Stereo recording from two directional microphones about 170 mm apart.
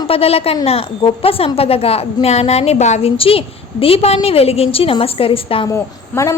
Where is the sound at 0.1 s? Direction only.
35° left (ahead or behind).